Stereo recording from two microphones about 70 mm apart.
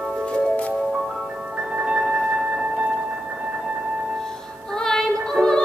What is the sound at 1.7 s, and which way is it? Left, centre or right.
Music, centre.